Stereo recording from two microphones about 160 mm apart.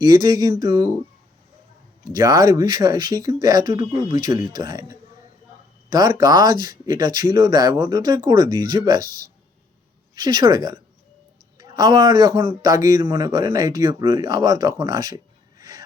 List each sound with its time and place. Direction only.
0.0 s a man's voice: 25° right (ahead or behind)
2.1 s a man's voice: 25° right (ahead or behind)